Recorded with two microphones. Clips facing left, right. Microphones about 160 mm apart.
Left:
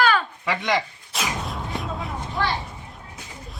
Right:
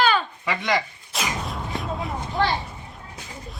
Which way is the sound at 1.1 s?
Centre (ahead or behind).